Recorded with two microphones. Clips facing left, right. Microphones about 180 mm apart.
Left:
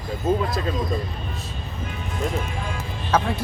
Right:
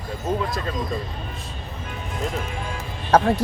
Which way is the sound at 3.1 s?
40° right (ahead or behind).